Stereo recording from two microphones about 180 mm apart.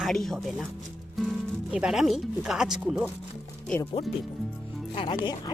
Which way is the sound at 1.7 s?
5° right (ahead or behind).